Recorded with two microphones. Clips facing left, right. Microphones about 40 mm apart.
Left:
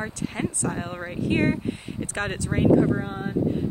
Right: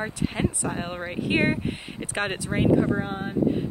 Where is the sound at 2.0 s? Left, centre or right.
Centre.